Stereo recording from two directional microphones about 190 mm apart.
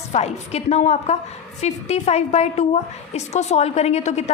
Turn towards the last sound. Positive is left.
turn(degrees=35)  # may be behind; listen again after turning